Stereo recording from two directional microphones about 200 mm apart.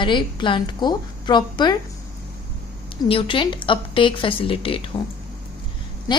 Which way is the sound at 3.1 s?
25° left (ahead or behind).